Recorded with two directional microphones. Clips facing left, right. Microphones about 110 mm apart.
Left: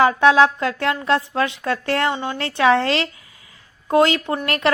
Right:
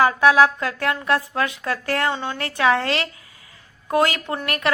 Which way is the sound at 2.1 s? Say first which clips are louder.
Left 2 dB; 15° left (ahead or behind).